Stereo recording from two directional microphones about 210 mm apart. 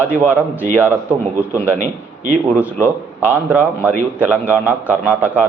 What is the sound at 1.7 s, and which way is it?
Speech, 35° right (ahead or behind).